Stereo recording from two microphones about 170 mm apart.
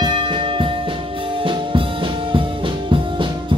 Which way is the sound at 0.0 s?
25° right (ahead or behind).